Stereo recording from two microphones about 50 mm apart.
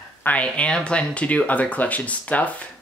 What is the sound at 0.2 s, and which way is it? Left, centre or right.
Speech, left.